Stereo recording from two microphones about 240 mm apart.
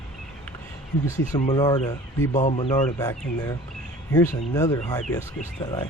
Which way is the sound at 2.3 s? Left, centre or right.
Left.